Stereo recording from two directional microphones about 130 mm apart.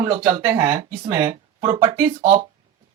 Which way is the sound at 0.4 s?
25° right (ahead or behind).